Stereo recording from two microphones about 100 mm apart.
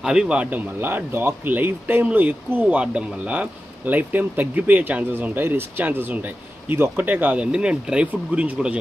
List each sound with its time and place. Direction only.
0.0 s speech: 10° right (ahead or behind)